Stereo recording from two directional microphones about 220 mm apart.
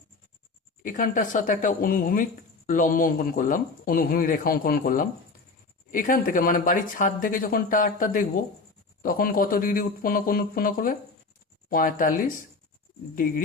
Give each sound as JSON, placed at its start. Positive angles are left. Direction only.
{"t": 0.8, "sound": "speech", "side_deg": 35}